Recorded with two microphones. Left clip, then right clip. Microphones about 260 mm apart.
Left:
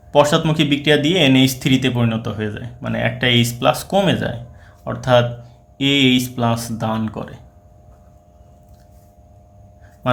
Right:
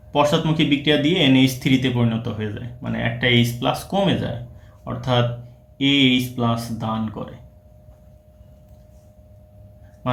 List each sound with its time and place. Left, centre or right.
0.1 s speech: left